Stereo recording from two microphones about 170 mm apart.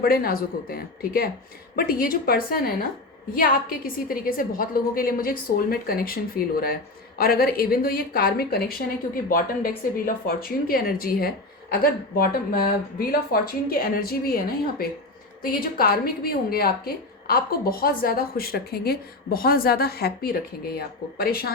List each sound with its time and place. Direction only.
0.0 s a woman's voice: 60° left (ahead or behind)